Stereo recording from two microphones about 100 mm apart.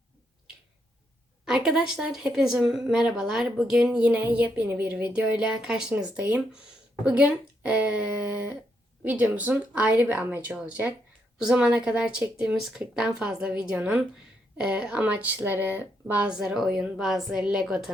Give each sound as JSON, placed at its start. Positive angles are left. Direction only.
{"t": 1.5, "sound": "speech", "side_deg": -5}